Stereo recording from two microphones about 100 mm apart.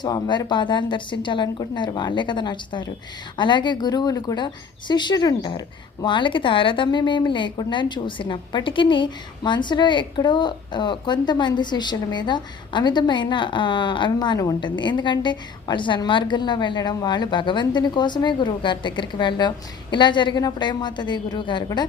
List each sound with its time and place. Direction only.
0.0 s speech: 50° left (ahead or behind)